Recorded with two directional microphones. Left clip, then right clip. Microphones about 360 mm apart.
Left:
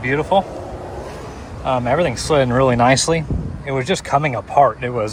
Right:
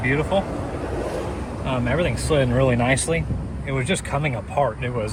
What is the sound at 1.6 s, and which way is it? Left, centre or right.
Speech, left.